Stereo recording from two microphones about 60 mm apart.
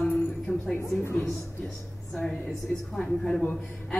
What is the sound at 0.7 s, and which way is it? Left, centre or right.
Speech, left.